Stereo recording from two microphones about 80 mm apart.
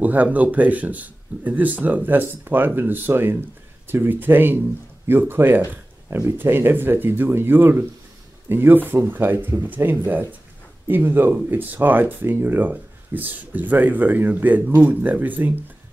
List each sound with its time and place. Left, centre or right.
0.0 s speech: centre